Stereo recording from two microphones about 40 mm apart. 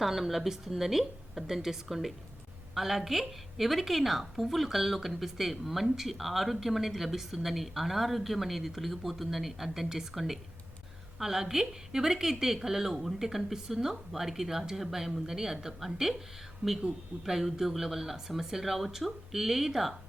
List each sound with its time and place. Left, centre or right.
0.0 s a woman's voice: centre
17.2 s a woman's voice: centre